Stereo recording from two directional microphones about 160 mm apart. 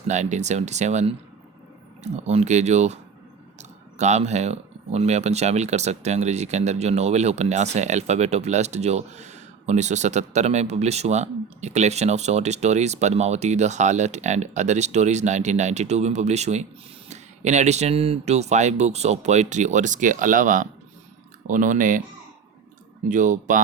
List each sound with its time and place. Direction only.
0.1 s speech: 45° right (ahead or behind)
2.1 s speech: 45° right (ahead or behind)
23.0 s speech: 50° right (ahead or behind)